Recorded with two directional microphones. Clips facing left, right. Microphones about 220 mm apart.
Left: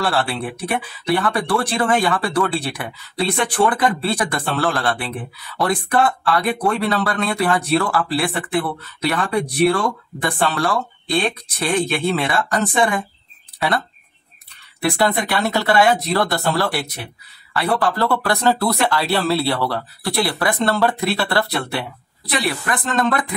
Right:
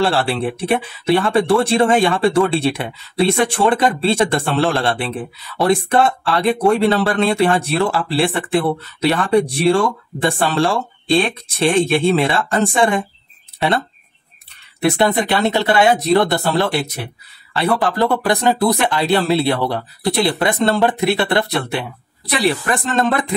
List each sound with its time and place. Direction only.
0.0 s speech: 25° right (ahead or behind)
14.8 s speech: 25° right (ahead or behind)